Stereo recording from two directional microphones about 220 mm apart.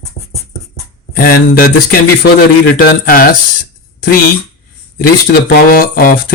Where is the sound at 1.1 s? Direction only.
40° left (ahead or behind).